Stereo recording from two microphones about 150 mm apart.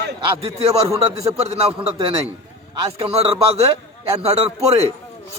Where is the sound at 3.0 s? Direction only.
40° right (ahead or behind).